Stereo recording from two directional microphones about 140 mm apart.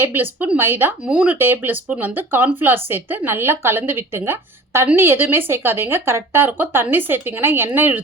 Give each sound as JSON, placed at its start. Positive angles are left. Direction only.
{"t": 0.0, "sound": "a woman's voice", "side_deg": -15}